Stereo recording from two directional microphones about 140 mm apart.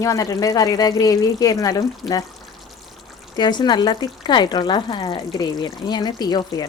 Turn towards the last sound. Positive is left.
turn(degrees=30)  # may be behind; listen again after turning